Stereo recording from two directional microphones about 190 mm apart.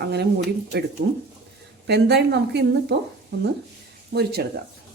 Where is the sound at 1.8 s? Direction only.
60° right (ahead or behind).